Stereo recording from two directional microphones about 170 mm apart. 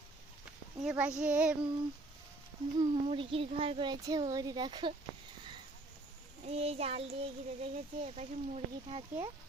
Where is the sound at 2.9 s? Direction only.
35° right (ahead or behind).